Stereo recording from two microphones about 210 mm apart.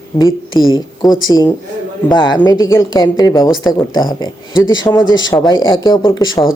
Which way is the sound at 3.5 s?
Centre (ahead or behind).